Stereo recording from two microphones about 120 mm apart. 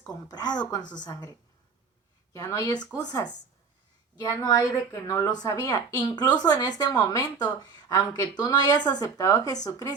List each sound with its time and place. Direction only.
0.3 s a woman's voice: 35° left (ahead or behind)
2.3 s a woman's voice: 30° left (ahead or behind)